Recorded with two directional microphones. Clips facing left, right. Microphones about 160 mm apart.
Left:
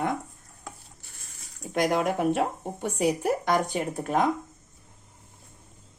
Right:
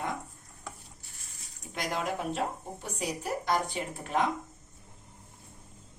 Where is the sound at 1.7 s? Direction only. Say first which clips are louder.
Left 8 dB; 55° left (ahead or behind).